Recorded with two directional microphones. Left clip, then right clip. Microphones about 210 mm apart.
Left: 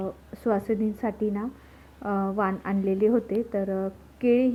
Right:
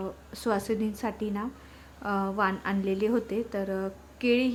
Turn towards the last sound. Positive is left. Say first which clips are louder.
# left 3 dB
turn(degrees=5)  # may be behind; listen again after turning